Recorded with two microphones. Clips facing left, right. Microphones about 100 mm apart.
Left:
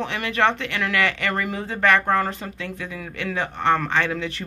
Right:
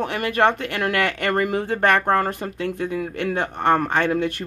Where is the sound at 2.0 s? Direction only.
35° right (ahead or behind).